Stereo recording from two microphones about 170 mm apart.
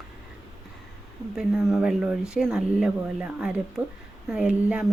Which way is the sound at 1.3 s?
5° right (ahead or behind).